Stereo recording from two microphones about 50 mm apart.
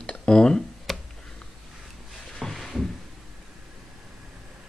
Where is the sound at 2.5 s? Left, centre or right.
Centre.